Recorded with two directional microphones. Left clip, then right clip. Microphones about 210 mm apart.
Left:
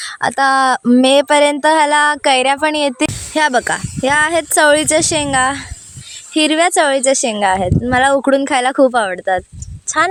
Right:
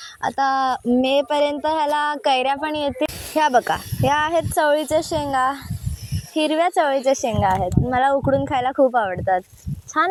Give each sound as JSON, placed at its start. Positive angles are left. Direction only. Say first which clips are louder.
{"t": 0.0, "sound": "speech", "louder": "left 7 dB", "side_deg": 40}